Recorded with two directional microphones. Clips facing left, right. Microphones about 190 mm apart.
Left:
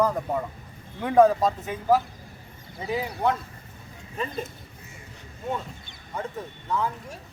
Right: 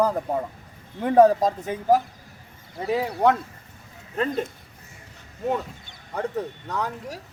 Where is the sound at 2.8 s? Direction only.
70° right (ahead or behind).